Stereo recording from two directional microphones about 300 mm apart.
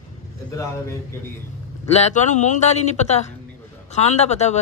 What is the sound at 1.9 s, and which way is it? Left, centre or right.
A man's voice, left.